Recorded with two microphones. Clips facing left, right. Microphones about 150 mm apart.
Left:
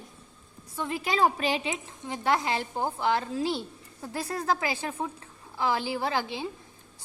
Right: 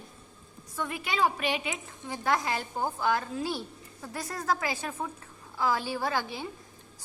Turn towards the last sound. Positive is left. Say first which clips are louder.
# left 2 dB
turn(degrees=25)  # may be behind; listen again after turning